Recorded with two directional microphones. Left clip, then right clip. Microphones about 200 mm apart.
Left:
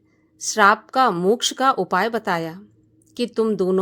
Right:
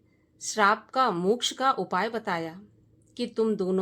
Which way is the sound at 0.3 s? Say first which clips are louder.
Left 8 dB; 30° left (ahead or behind).